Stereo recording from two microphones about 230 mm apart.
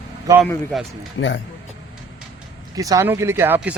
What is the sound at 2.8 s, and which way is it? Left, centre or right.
Speech, centre.